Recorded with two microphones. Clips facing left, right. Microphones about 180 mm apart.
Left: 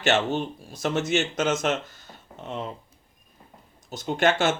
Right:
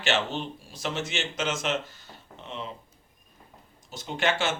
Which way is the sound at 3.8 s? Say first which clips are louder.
Left 5 dB; 45° left (ahead or behind).